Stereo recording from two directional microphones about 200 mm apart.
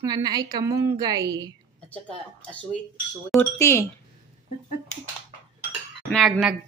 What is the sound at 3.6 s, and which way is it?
Speech, 15° left (ahead or behind).